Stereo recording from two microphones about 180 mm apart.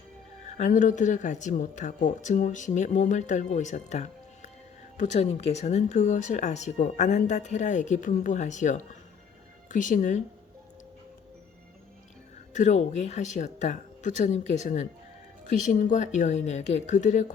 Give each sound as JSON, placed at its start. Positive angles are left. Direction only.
{"t": 0.5, "sound": "a woman's voice", "side_deg": 45}
{"t": 12.5, "sound": "speech", "side_deg": 40}